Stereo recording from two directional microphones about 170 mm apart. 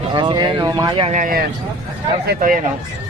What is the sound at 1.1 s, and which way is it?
Speech, 50° right (ahead or behind).